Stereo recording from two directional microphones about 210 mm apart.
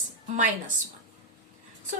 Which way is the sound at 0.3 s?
35° right (ahead or behind).